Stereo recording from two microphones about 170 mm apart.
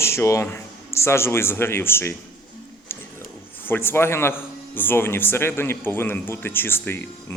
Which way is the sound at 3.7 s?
10° left (ahead or behind).